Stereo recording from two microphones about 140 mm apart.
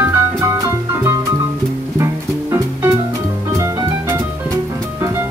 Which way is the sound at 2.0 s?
20° right (ahead or behind).